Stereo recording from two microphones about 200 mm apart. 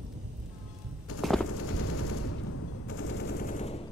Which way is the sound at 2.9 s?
70° left (ahead or behind).